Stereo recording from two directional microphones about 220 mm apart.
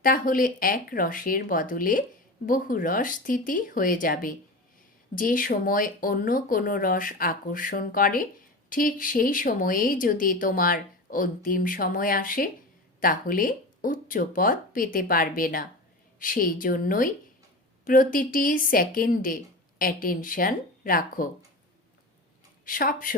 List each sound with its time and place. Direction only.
0.0 s speech: 40° left (ahead or behind)
22.6 s speech: 40° left (ahead or behind)